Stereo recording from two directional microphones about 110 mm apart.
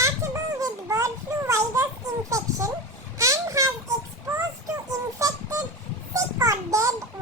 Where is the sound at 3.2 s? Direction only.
30° right (ahead or behind).